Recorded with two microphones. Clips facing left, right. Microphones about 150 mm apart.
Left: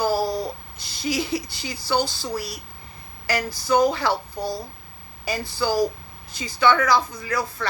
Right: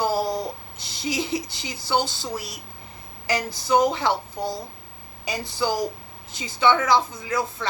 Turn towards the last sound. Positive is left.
turn(degrees=-20)  # may be behind; listen again after turning